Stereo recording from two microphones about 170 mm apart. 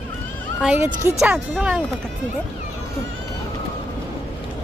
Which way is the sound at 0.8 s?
50° right (ahead or behind).